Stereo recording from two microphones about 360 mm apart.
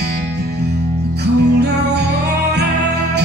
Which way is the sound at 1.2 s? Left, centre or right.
Right.